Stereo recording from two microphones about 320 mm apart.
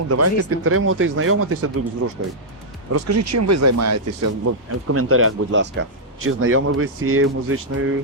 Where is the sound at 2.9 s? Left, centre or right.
Right.